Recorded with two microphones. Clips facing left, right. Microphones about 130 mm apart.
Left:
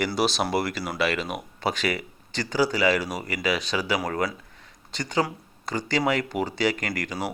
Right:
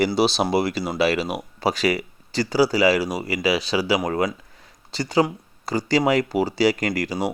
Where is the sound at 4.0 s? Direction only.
20° right (ahead or behind).